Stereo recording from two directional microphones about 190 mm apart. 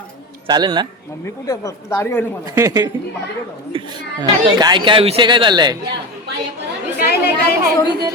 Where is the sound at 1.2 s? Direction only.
20° left (ahead or behind).